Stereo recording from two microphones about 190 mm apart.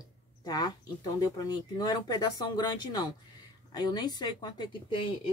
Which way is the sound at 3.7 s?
20° left (ahead or behind).